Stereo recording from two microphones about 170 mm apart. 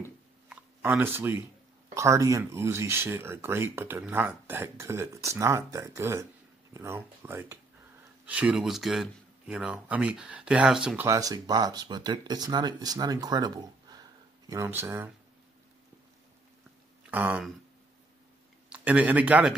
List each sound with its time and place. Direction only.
0.5 s a sound: 10° right (ahead or behind)
2.0 s speech: 20° right (ahead or behind)
11.1 s speech: 20° right (ahead or behind)
17.1 s speech: 10° right (ahead or behind)
18.7 s speech: 10° right (ahead or behind)